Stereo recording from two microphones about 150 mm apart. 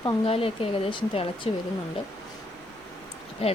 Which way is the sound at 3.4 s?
40° left (ahead or behind).